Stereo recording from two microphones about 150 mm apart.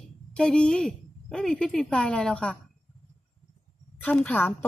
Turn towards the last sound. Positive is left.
turn(degrees=10)  # may be behind; listen again after turning